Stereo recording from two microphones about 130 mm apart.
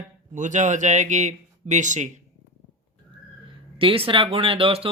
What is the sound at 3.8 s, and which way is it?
Speech, 45° right (ahead or behind).